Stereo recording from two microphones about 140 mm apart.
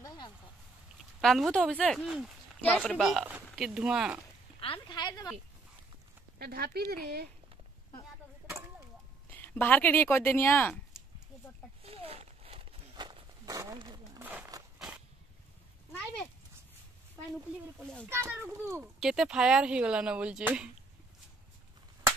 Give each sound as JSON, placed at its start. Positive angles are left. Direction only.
{"t": 1.2, "sound": "speech", "side_deg": 0}
{"t": 2.6, "sound": "speech", "side_deg": 10}
{"t": 3.0, "sound": "speech", "side_deg": -5}
{"t": 4.6, "sound": "a sound", "side_deg": 40}
{"t": 6.3, "sound": "speech", "side_deg": -90}
{"t": 9.3, "sound": "speech", "side_deg": 15}
{"t": 11.8, "sound": "walk", "side_deg": -45}
{"t": 13.6, "sound": "speech", "side_deg": -30}
{"t": 14.2, "sound": "a sound", "side_deg": -10}
{"t": 18.1, "sound": "speech", "side_deg": -20}
{"t": 18.9, "sound": "speech", "side_deg": -5}